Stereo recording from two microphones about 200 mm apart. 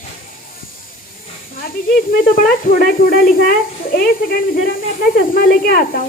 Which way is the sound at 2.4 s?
45° left (ahead or behind).